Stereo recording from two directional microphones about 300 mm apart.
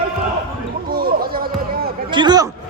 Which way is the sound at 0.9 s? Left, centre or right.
Right.